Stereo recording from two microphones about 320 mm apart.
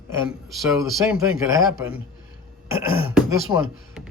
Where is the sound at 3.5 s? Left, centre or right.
Centre.